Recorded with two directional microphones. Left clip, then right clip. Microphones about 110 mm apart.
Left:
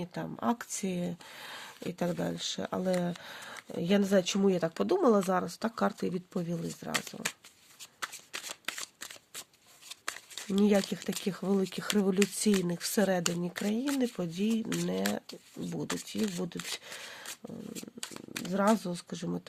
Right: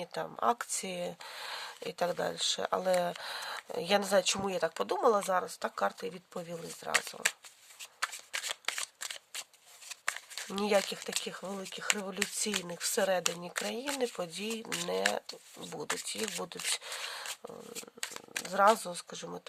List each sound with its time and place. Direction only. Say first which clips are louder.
0.0 s speech: right 3 dB; 50° right (ahead or behind); by 6.4 s 5° right (ahead or behind)
6.5 s speech: right 4 dB; 20° right (ahead or behind)
8.0 s shuffling cards: right 4 dB; 20° right (ahead or behind)
10.1 s a sound: even; 10° right (ahead or behind)
10.6 s speech: left 1 dB; 30° right (ahead or behind)
11.2 s speech: left 7 dB; 5° right (ahead or behind)
12.4 s speech: left 4 dB; 10° right (ahead or behind); by 17.5 s 35° right (ahead or behind)
17.7 s shuffling cards: right 1 dB; 20° right (ahead or behind)
18.5 s speech: right 3 dB; 30° right (ahead or behind)